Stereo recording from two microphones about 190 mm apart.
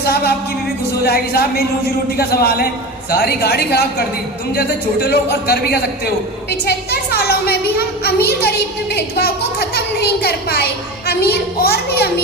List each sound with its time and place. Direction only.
0.0 s music: 55° left (ahead or behind)
1.0 s a woman's voice: 55° left (ahead or behind)
11.0 s a woman's voice: 55° left (ahead or behind)